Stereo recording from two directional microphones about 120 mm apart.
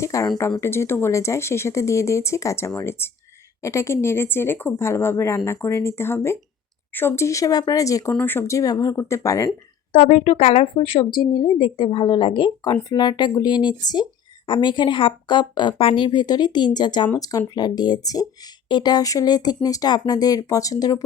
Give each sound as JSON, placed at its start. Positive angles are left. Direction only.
{"t": 0.0, "sound": "speech", "side_deg": 25}
{"t": 9.9, "sound": "a woman's voice", "side_deg": 75}
{"t": 10.2, "sound": "speech", "side_deg": 55}